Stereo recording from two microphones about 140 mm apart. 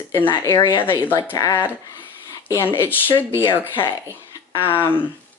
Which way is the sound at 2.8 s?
15° left (ahead or behind).